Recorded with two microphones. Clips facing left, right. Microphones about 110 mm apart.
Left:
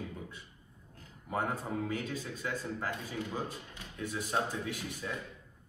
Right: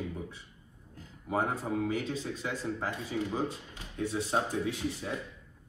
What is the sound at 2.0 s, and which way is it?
A man's voice, 25° right (ahead or behind).